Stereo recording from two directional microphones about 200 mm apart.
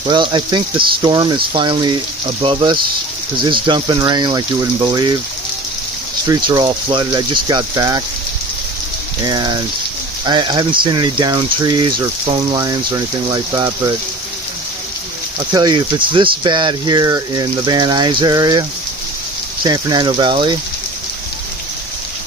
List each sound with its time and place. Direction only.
0.1 s speech: 25° right (ahead or behind)
6.2 s speech: 15° right (ahead or behind)
9.2 s speech: 20° right (ahead or behind)
15.5 s speech: 20° right (ahead or behind)
19.6 s speech: 20° right (ahead or behind)